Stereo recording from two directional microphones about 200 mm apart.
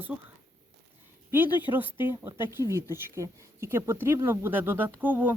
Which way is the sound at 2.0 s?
10° right (ahead or behind).